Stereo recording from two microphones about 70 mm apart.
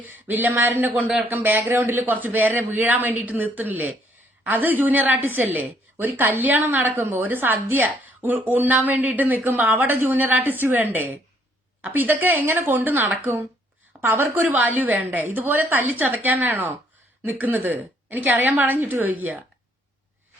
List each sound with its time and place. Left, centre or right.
0.0 s a woman's voice: right
1.3 s a woman's voice: right
12.2 s a woman's voice: right